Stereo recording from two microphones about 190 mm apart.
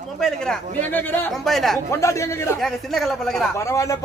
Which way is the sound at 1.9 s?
15° left (ahead or behind).